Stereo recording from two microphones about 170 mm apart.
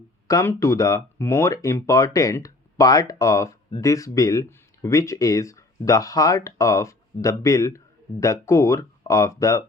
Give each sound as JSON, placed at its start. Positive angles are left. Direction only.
{"t": 0.3, "sound": "speech", "side_deg": 20}